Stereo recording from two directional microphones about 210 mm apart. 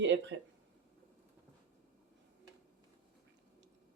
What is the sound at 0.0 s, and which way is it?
Speech, 60° right (ahead or behind).